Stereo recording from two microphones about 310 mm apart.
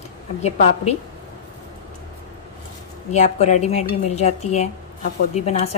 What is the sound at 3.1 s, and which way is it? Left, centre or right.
Speech, left.